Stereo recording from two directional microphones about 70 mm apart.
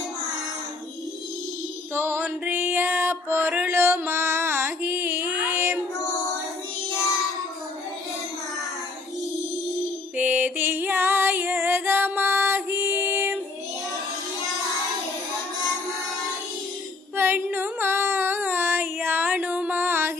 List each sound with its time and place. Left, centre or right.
1.9 s music: right
10.2 s music: right
17.2 s a sound: right